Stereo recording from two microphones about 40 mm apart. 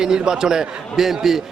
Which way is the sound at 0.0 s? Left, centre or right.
Centre.